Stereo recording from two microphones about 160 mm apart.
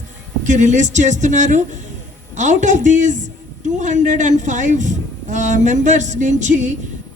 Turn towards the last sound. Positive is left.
turn(degrees=-50)  # may be behind; listen again after turning